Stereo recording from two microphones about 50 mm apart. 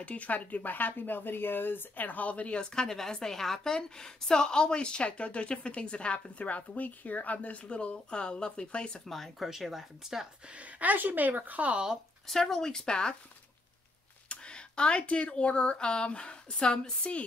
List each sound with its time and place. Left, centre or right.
0.0 s speech: left
9.0 s speech: centre
10.5 s speech: right
12.3 s speech: centre
14.3 s speech: centre